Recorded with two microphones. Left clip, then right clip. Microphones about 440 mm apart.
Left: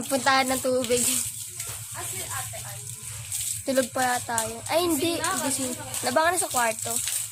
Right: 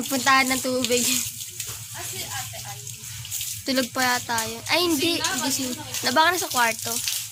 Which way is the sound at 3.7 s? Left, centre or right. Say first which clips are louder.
Right 1 dB; left.